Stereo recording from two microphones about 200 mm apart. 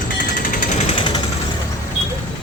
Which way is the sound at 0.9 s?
25° left (ahead or behind).